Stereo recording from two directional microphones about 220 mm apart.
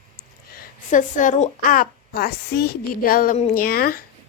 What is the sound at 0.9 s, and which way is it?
A woman's voice, 35° left (ahead or behind).